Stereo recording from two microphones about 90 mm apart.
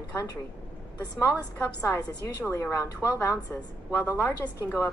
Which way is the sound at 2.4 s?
30° left (ahead or behind).